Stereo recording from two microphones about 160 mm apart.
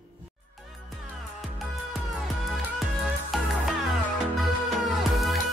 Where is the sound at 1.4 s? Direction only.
Centre (ahead or behind).